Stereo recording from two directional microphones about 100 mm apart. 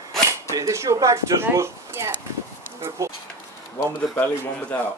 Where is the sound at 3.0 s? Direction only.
30° right (ahead or behind).